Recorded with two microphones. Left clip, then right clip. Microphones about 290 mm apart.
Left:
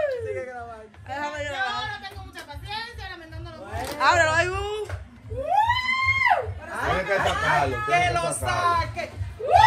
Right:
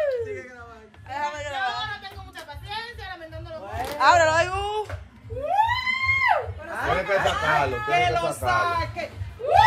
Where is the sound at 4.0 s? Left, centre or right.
Centre.